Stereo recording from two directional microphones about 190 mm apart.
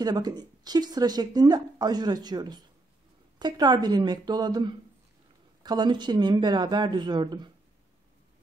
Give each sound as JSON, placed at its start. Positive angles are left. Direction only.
{"t": 0.0, "sound": "a woman's voice", "side_deg": -20}